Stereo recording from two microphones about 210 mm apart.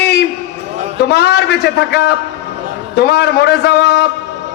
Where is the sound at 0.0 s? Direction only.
50° left (ahead or behind).